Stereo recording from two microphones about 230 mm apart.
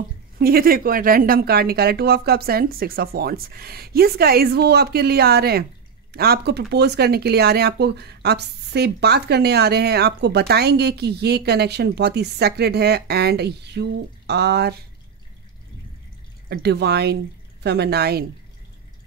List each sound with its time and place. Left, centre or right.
0.4 s a woman's voice: right
16.4 s speech: right